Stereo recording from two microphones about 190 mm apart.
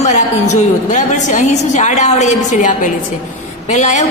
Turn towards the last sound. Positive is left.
turn(degrees=40)  # may be behind; listen again after turning